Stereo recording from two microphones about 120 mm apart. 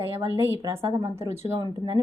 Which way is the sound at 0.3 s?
20° right (ahead or behind).